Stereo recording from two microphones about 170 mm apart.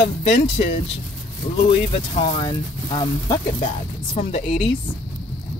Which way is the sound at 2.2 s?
30° left (ahead or behind).